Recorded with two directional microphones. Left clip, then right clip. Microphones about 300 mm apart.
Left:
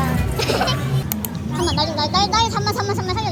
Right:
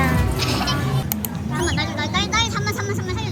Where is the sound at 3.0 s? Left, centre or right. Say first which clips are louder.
Left 5 dB; centre.